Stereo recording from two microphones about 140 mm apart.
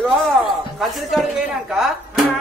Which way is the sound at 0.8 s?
Centre (ahead or behind).